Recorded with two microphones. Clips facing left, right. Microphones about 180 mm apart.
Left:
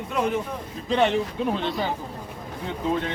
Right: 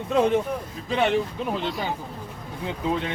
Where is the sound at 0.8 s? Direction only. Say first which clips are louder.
Left 1 dB; 5° right (ahead or behind).